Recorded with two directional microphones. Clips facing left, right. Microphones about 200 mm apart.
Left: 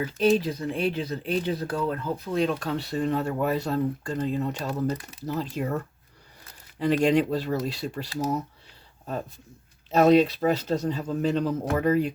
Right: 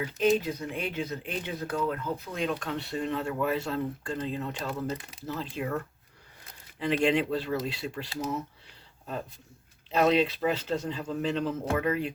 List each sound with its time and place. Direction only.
0.0 s speech: 35° left (ahead or behind)
6.7 s speech: 40° left (ahead or behind)
9.9 s speech: 40° left (ahead or behind)